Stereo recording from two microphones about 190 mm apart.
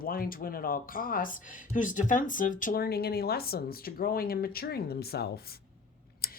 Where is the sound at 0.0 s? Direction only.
50° left (ahead or behind).